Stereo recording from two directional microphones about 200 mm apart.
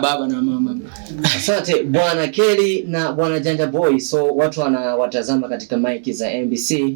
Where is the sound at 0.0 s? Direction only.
Centre (ahead or behind).